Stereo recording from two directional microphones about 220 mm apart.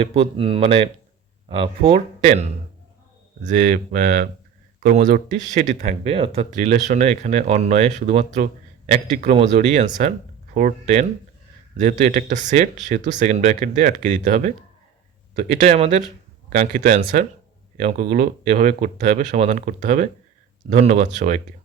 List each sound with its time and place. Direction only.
0.0 s speech: 25° right (ahead or behind)